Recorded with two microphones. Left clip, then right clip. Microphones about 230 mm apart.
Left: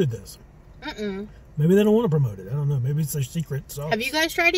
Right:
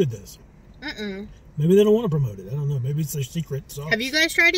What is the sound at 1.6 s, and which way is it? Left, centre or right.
Speech, centre.